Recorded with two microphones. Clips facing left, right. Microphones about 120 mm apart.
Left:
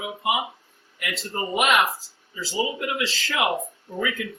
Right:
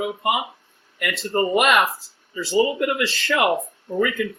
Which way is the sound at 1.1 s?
Centre (ahead or behind).